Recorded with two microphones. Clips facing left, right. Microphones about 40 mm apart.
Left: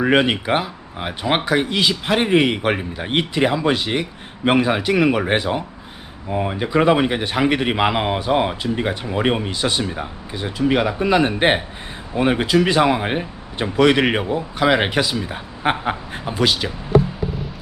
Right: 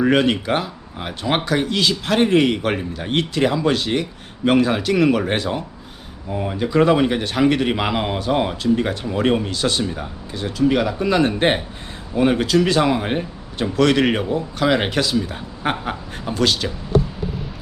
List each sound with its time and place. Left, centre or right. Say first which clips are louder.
0.0 s a man's voice: even; centre